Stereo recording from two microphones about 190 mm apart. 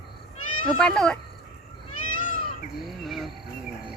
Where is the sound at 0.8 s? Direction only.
5° left (ahead or behind).